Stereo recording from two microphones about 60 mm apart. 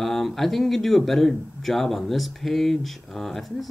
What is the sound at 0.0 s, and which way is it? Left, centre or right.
Speech, centre.